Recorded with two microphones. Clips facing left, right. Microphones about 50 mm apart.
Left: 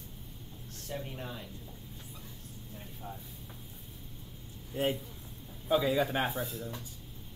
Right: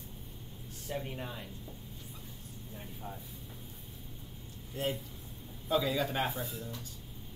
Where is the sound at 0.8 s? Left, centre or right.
Centre.